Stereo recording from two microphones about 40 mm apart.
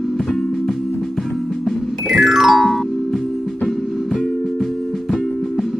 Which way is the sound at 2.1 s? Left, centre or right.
Centre.